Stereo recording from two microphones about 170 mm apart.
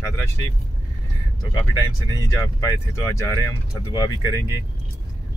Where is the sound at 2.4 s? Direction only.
15° left (ahead or behind).